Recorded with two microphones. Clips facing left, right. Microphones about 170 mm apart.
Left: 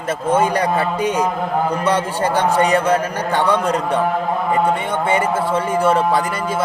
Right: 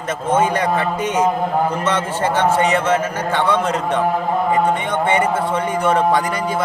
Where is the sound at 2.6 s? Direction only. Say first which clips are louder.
Left 1 dB; 35° left (ahead or behind).